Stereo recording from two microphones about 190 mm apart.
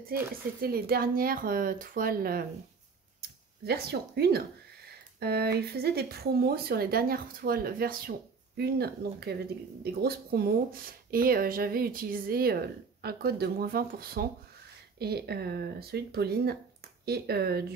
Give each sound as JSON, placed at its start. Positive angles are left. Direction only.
{"t": 0.6, "sound": "speech", "side_deg": -55}